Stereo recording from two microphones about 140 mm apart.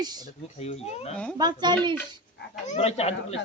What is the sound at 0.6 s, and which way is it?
Speech, 50° left (ahead or behind).